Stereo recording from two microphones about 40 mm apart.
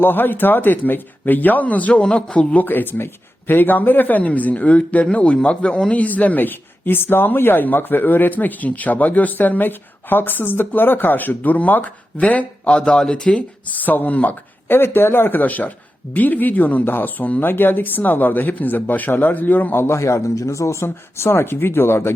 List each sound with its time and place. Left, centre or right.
0.0 s speech: left
2.0 s a man's voice: left
2.6 s speech: left
5.9 s speech: left
12.6 s a man's voice: left
13.7 s speech: left
14.7 s speech: left
15.3 s speech: left
16.8 s speech: left
20.8 s speech: left